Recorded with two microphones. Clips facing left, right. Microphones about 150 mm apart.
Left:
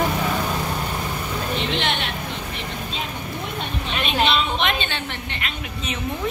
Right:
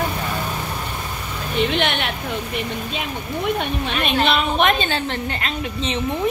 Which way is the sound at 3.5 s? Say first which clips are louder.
Right 4 dB; 55° right (ahead or behind).